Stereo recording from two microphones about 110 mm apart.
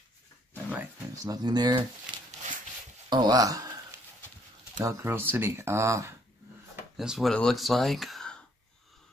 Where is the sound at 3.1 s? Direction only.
40° right (ahead or behind).